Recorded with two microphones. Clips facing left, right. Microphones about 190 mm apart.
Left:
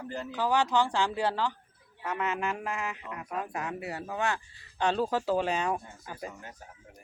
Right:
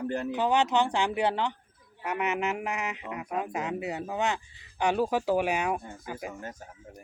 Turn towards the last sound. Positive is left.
turn(degrees=-15)  # may be behind; listen again after turning